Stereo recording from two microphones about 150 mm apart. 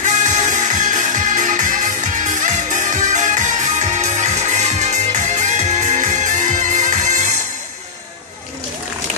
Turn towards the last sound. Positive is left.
turn(degrees=-55)  # may be behind; listen again after turning